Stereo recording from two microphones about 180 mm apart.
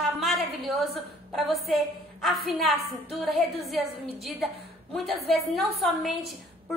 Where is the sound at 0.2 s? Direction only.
Centre (ahead or behind).